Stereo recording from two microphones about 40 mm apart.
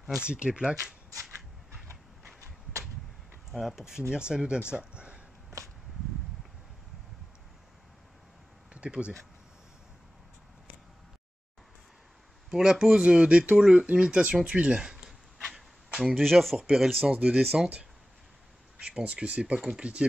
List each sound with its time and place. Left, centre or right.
0.0 s speech: right
3.5 s speech: centre
3.8 s speech: centre
8.7 s speech: right
12.4 s speech: centre; by 13.6 s right
13.6 s speech: right
15.9 s a sound: right
16.2 s speech: centre
17.0 s speech: right
18.9 s speech: right
19.6 s speech: centre